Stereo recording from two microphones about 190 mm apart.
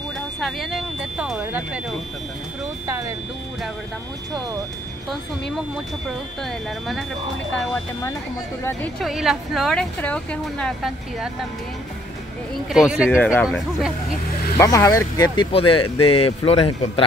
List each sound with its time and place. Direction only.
0.4 s speech: centre (ahead or behind)
9.0 s speech: centre (ahead or behind)
12.7 s speech: 5° right (ahead or behind)
13.2 s speech: 5° left (ahead or behind)
14.6 s speech: 15° left (ahead or behind)